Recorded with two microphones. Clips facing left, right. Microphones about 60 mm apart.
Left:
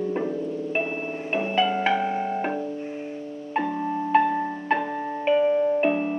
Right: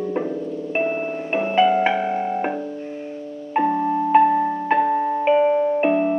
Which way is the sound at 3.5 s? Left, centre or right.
Centre.